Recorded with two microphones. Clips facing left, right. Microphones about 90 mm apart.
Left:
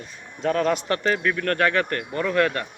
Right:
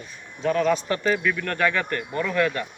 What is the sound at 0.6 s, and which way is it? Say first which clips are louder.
Speech: right 1 dB; 55° left (ahead or behind).